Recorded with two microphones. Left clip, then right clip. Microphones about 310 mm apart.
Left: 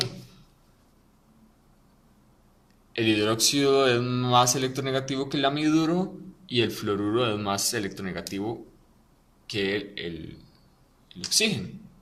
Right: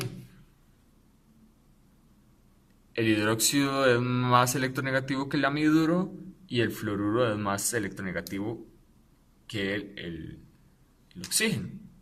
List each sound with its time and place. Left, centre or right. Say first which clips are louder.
2.9 s speech: left 2 dB; right